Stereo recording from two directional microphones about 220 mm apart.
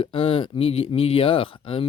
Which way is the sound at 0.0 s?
25° left (ahead or behind).